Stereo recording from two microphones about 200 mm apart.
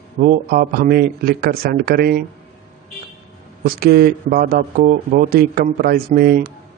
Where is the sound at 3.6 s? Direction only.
50° right (ahead or behind).